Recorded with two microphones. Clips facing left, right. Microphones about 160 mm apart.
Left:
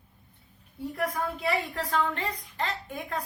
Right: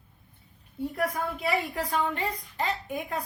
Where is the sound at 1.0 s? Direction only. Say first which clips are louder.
Even; 5° right (ahead or behind).